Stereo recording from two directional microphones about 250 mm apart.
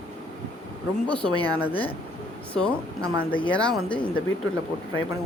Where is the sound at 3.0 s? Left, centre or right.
Centre.